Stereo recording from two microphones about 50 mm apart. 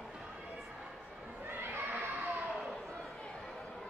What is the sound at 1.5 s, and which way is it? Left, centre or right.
Children playing, right.